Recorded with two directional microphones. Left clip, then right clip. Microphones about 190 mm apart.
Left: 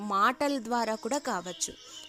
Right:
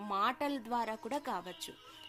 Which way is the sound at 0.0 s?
45° left (ahead or behind).